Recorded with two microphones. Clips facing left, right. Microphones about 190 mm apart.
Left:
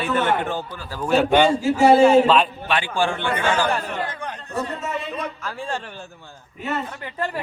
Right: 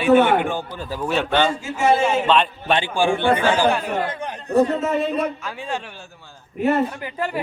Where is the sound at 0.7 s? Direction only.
20° right (ahead or behind).